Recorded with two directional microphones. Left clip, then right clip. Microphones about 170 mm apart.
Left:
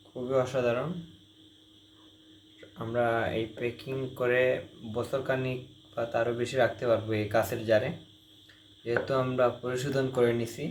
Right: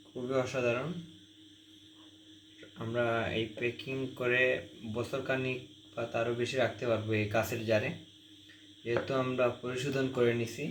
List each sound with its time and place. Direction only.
0.3 s speech: centre (ahead or behind)
2.7 s speech: centre (ahead or behind)